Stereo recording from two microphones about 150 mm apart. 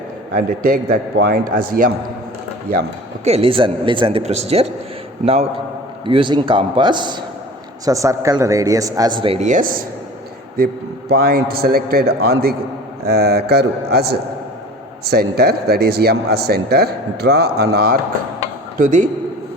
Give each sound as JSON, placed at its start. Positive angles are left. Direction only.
{"t": 0.3, "sound": "a man's voice", "side_deg": -70}
{"t": 3.2, "sound": "a man's voice", "side_deg": -40}
{"t": 9.4, "sound": "speech", "side_deg": -60}
{"t": 10.6, "sound": "a man's voice", "side_deg": -90}
{"t": 18.8, "sound": "speech", "side_deg": -60}